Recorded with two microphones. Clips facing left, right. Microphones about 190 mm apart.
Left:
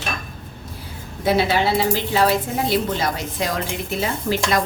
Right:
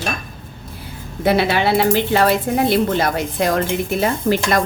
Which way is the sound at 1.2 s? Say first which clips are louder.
Right 2 dB; 60° right (ahead or behind).